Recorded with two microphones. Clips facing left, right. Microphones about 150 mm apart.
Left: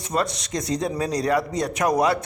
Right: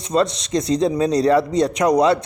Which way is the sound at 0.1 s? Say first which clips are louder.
Right 7 dB; 25° right (ahead or behind).